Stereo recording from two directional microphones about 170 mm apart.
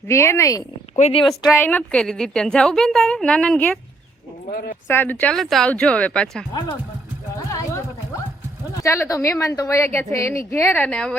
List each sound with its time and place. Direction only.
0.1 s a woman's voice: 15° left (ahead or behind)
0.9 s speech: 40° left (ahead or behind)
1.5 s a woman's voice: 10° left (ahead or behind)
4.5 s speech: 60° left (ahead or behind)
4.9 s a woman's voice: 10° left (ahead or behind)
6.5 s speech: 25° left (ahead or behind)
8.8 s a woman's voice: 20° left (ahead or behind)